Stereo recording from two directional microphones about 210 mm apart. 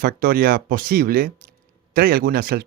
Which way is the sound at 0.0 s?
45° right (ahead or behind).